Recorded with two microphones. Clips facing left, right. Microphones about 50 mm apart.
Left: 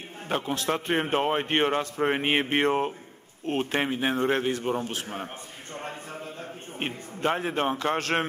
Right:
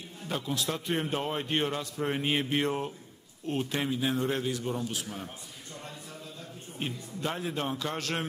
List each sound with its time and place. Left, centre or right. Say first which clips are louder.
0.3 s a man's voice: left 5 dB; left
5.8 s a sound: left 8 dB; left
6.8 s a man's voice: left 5 dB; left